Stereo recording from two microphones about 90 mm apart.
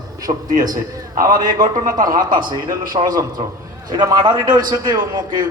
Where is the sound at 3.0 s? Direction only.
85° right.